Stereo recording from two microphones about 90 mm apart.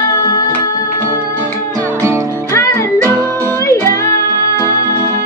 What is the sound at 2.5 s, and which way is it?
Music, 35° left (ahead or behind).